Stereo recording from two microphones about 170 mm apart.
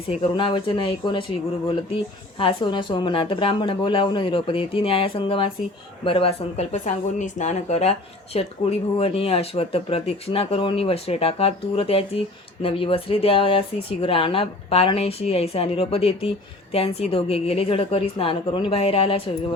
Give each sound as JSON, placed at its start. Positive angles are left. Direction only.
{"t": 0.1, "sound": "speech", "side_deg": 30}
{"t": 2.4, "sound": "speech", "side_deg": 30}